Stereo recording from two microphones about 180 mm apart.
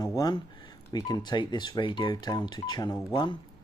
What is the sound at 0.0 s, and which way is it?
Speech, 20° left (ahead or behind).